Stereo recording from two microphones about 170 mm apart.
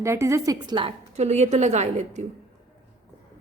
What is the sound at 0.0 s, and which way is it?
A woman's voice, 15° right (ahead or behind).